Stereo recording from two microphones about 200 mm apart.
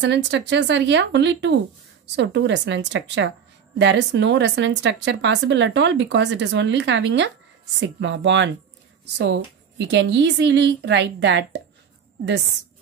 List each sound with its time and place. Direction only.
0.0 s a woman's voice: 60° right (ahead or behind)